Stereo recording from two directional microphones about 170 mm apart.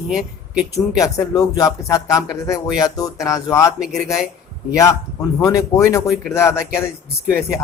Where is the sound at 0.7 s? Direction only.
20° left (ahead or behind).